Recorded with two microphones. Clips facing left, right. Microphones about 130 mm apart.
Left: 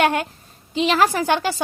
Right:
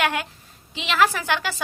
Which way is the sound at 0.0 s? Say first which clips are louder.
Left 5 dB; 35° left (ahead or behind).